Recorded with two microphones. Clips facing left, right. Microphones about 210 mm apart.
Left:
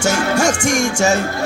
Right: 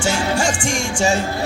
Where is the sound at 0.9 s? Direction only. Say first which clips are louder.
Right 2 dB; 45° left (ahead or behind).